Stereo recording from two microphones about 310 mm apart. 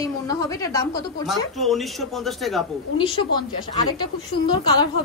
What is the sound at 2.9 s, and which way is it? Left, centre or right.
A woman's voice, centre.